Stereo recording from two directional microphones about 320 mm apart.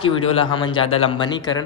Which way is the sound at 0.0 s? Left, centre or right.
Centre.